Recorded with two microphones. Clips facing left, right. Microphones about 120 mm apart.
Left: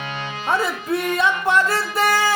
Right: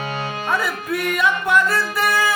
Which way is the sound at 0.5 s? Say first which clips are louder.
Left 3 dB; 25° left (ahead or behind).